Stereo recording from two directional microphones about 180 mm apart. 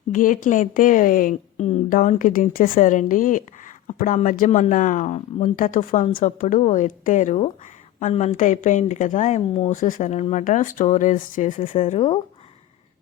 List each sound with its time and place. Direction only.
0.1 s a woman's voice: 50° left (ahead or behind)
11.8 s a woman's voice: 35° left (ahead or behind)